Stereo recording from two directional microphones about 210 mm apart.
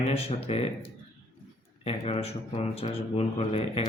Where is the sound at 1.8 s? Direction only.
30° left (ahead or behind).